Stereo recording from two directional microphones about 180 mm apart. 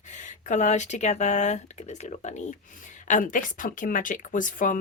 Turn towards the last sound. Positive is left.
turn(degrees=45)  # may be behind; listen again after turning